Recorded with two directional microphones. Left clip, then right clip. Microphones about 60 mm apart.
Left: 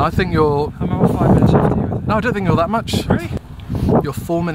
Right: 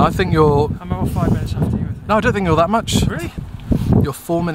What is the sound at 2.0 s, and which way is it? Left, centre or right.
Speech, right.